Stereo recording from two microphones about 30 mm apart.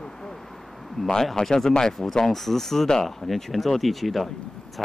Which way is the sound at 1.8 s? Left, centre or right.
Centre.